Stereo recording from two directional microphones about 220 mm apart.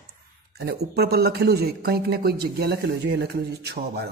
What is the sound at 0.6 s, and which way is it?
A man's voice, 45° right (ahead or behind).